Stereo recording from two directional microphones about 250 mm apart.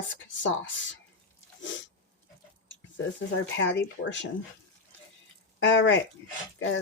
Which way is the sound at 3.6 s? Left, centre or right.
Left.